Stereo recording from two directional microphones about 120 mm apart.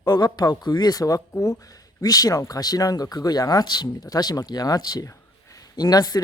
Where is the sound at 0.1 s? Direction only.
35° left (ahead or behind).